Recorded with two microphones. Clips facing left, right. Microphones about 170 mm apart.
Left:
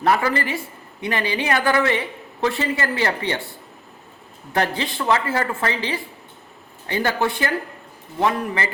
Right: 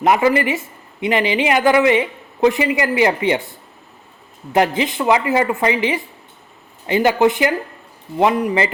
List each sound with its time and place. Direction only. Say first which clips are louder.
0.0 s a woman's voice: right 5 dB; 15° right (ahead or behind)
4.5 s a woman's voice: right 6 dB; 15° right (ahead or behind)